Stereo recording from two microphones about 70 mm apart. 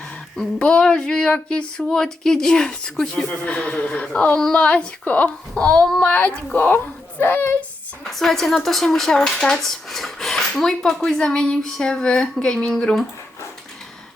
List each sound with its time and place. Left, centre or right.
0.3 s speech: centre
4.4 s speech: centre
4.6 s a woman's voice: centre
8.1 s speech: centre